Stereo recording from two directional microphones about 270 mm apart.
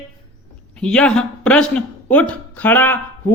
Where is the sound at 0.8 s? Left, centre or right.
Centre.